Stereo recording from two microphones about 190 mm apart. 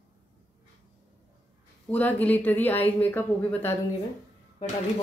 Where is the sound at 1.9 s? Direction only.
10° left (ahead or behind).